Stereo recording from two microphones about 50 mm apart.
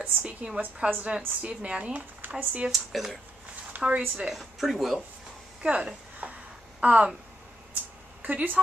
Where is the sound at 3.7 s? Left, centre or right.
Right.